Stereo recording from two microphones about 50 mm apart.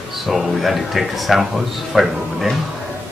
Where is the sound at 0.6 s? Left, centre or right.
Centre.